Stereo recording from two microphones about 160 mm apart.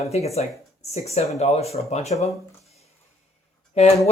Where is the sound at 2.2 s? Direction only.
40° left (ahead or behind).